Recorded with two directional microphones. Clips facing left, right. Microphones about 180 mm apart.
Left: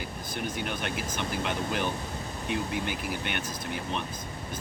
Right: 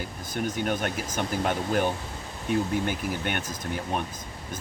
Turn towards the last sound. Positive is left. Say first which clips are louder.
# right 3 dB
turn(degrees=-45)  # may be behind; listen again after turning